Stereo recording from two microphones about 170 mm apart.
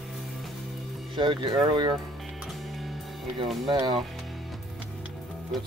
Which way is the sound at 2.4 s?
Centre (ahead or behind).